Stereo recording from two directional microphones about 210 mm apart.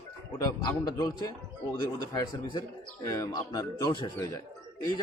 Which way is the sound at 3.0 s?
15° left (ahead or behind).